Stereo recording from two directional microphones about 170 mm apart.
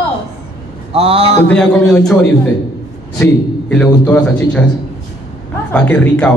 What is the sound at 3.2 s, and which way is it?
A man's voice, 15° left (ahead or behind).